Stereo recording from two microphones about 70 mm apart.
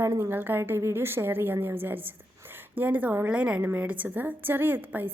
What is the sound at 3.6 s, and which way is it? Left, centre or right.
A woman's voice, right.